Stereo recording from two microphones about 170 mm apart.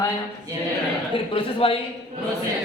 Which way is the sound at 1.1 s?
30° left (ahead or behind).